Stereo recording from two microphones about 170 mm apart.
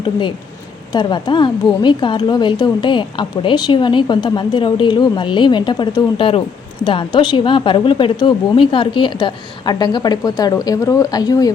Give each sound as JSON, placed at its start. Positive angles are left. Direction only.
{"t": 0.0, "sound": "a woman's voice", "side_deg": 30}